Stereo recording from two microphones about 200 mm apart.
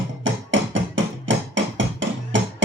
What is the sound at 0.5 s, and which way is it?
Music, 70° right (ahead or behind).